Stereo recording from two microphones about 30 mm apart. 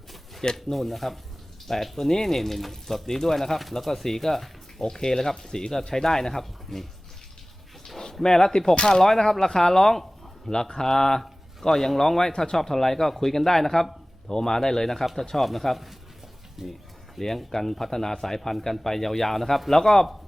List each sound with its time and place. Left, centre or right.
0.5 s speech: centre
8.2 s speech: centre
9.0 s speech: centre
10.5 s speech: left; by 15.9 s centre
16.6 s speech: centre
17.2 s speech: centre
19.7 s speech: centre